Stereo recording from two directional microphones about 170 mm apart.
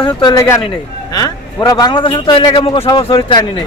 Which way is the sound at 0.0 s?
25° left (ahead or behind).